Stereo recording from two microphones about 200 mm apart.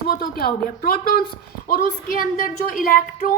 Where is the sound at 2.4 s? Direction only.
45° left (ahead or behind).